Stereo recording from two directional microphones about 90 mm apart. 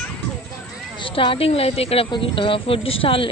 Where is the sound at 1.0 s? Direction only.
85° left.